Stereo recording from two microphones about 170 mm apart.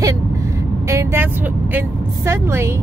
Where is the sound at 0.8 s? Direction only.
15° right (ahead or behind).